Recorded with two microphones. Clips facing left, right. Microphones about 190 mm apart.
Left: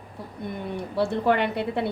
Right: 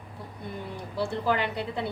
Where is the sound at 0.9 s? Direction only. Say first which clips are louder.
Left 5 dB; 60° left (ahead or behind).